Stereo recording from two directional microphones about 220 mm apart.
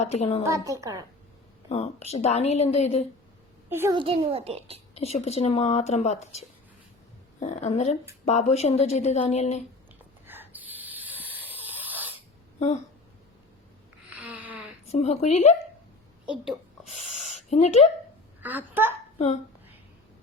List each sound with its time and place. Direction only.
0.0 s speech: 30° left (ahead or behind)
0.4 s a woman's voice: 15° right (ahead or behind)
1.7 s speech: 30° left (ahead or behind)
3.7 s a child's voice: 10° right (ahead or behind)
3.9 s a child's voice: 25° right (ahead or behind)
4.9 s a woman's voice: 30° left (ahead or behind)
10.2 s a sound: 10° right (ahead or behind)
12.5 s speech: 30° left (ahead or behind)
14.2 s a sound: 5° right (ahead or behind)
14.8 s a woman's voice: 30° left (ahead or behind)
16.2 s a woman's voice: 5° right (ahead or behind)
17.2 s a sound: 30° left (ahead or behind)
18.4 s a woman's voice: 10° right (ahead or behind)